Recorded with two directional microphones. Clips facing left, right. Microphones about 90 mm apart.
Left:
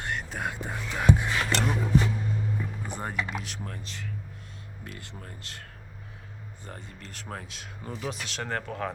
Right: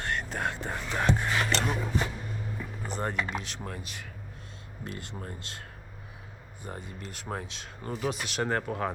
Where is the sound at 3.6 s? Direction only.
10° right (ahead or behind).